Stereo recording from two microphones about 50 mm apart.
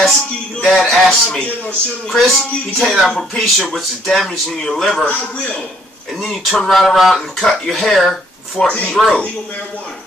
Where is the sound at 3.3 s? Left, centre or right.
Centre.